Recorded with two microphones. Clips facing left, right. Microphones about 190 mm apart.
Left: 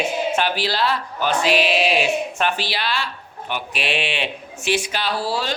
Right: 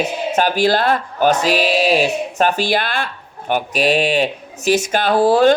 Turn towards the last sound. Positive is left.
turn(degrees=-50)  # may be behind; listen again after turning